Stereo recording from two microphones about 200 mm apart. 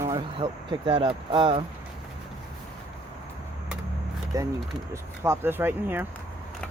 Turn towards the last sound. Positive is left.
turn(degrees=-10)  # may be behind; listen again after turning